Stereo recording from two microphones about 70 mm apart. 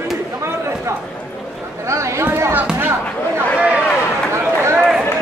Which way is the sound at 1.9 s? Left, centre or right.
Right.